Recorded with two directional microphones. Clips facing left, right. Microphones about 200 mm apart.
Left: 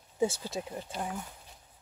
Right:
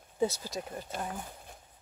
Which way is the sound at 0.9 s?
50° right (ahead or behind).